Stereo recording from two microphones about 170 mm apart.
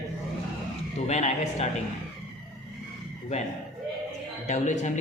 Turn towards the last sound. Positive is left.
turn(degrees=45)  # may be behind; listen again after turning